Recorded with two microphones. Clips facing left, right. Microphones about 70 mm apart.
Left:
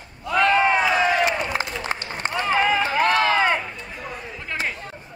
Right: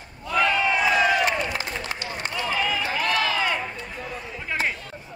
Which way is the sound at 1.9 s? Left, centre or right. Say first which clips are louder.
Left 3 dB; left.